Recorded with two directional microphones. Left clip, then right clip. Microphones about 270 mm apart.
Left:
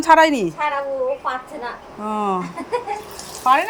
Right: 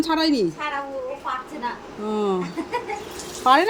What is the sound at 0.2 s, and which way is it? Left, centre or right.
Speech, left.